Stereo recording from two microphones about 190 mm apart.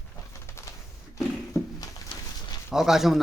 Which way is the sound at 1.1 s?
20° left (ahead or behind).